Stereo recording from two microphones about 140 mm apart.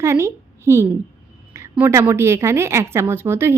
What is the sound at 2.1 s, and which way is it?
Speech, 20° right (ahead or behind).